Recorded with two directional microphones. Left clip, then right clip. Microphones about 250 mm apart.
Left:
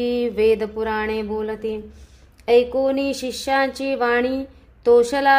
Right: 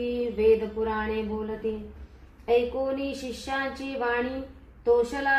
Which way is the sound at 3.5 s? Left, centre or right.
Left.